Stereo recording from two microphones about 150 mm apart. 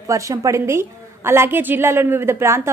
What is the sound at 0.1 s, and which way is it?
A woman's voice, 20° right (ahead or behind).